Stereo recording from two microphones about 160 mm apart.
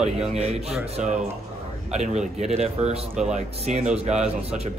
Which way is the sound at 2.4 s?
45° right (ahead or behind).